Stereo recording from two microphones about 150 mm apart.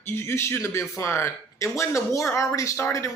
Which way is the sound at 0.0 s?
15° left (ahead or behind).